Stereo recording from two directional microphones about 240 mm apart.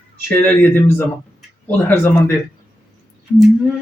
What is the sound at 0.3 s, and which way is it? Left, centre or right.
Speech, centre.